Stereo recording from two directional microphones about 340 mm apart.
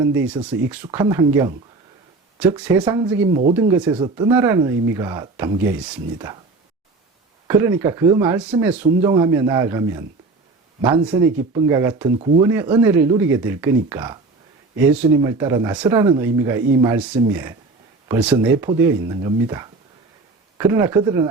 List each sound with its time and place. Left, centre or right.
0.0 s speech: centre
7.4 s speech: centre